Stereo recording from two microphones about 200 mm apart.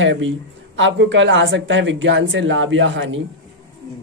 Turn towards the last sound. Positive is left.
turn(degrees=-70)  # may be behind; listen again after turning